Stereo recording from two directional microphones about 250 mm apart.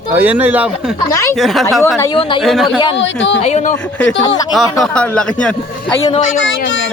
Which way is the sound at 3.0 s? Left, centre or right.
Left.